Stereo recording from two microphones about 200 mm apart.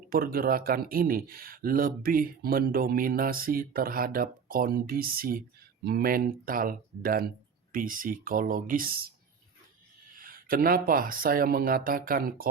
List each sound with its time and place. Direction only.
0.1 s a man's voice: 45° right (ahead or behind)
10.2 s a man's voice: 45° right (ahead or behind)